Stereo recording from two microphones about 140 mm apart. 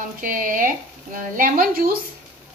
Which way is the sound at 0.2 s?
80° right.